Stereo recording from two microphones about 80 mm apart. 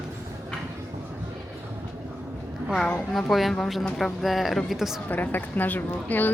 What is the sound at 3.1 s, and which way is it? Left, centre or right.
Speech, centre.